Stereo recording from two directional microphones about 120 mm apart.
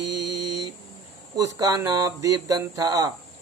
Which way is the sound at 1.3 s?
30° right (ahead or behind).